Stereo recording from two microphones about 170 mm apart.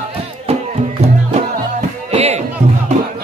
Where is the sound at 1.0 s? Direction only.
40° right (ahead or behind).